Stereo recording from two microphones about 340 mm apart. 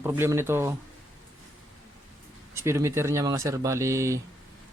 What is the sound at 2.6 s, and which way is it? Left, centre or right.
Speech, centre.